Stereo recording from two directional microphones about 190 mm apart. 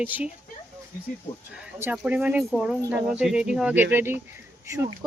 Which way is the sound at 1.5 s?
5° right (ahead or behind).